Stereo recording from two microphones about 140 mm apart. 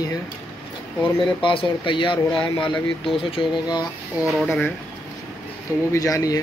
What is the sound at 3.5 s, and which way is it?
Speech, 30° left (ahead or behind).